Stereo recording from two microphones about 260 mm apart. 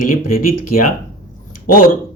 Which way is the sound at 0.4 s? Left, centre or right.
Left.